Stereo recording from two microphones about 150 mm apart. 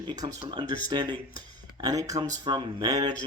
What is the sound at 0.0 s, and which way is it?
Speech, 30° right (ahead or behind).